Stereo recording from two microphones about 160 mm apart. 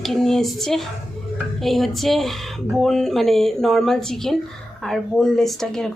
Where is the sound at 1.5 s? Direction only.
Centre (ahead or behind).